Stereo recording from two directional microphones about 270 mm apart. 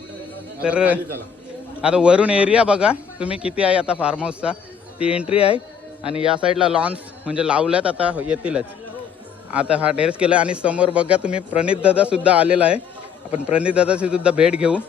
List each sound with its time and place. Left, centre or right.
0.6 s a man's voice: centre
4.9 s speech: left
6.4 s a man's voice: centre